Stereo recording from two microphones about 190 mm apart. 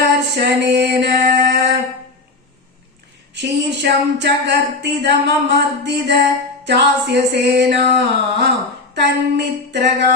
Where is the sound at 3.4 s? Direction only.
65° right (ahead or behind).